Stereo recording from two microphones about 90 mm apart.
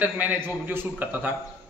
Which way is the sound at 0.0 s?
20° right (ahead or behind).